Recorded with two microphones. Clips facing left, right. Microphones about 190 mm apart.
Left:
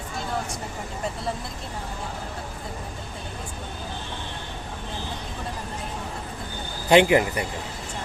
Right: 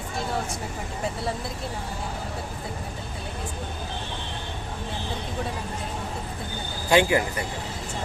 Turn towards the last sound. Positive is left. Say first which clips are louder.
# left 3 dB
turn(degrees=20)  # may be behind; listen again after turning